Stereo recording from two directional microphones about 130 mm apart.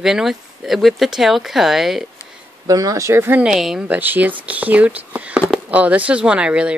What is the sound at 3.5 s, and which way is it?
Speech, centre (ahead or behind).